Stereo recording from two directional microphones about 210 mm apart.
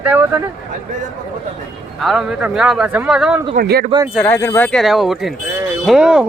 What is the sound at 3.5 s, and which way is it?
Speech, 45° right (ahead or behind).